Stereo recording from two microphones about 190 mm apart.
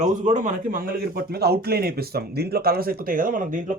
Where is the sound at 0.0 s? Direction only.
40° right (ahead or behind).